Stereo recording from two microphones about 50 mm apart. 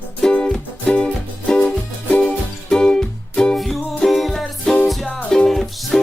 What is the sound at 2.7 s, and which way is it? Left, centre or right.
Music, centre.